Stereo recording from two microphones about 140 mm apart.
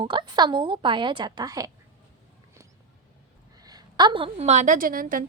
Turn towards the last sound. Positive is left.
turn(degrees=-80)